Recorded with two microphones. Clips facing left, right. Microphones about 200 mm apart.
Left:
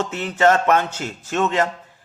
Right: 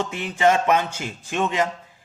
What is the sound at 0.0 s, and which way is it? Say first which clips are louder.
Speech: left 2 dB; 15° right (ahead or behind).